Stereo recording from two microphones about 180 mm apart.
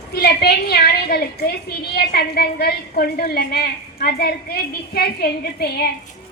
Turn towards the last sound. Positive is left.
turn(degrees=60)  # may be behind; listen again after turning